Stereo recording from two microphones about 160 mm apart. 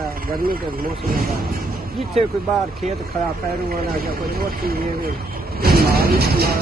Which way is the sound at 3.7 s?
70° right (ahead or behind).